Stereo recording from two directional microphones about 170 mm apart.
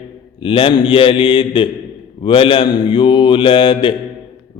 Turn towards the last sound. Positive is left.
turn(degrees=30)  # may be behind; listen again after turning